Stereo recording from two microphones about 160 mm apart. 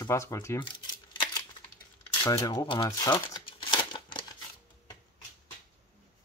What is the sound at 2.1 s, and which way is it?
Crumpling, 25° left (ahead or behind).